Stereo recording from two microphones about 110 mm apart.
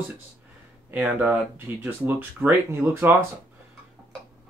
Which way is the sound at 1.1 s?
15° right (ahead or behind).